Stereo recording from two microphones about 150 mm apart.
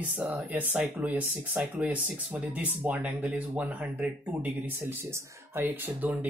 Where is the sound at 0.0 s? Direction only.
10° right (ahead or behind).